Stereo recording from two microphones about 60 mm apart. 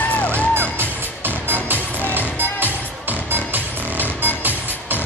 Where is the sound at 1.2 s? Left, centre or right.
Right.